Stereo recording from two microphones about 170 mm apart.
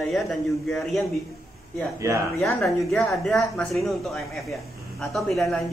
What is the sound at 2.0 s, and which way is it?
Speech, 15° right (ahead or behind).